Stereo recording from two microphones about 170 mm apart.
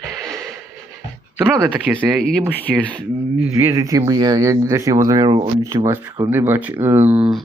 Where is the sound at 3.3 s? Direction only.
15° right (ahead or behind).